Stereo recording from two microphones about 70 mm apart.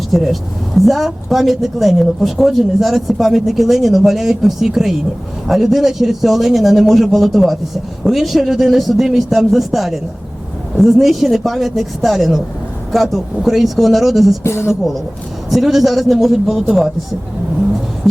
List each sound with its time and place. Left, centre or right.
0.1 s speech: centre
14.4 s a woman's voice: left
15.4 s speech: centre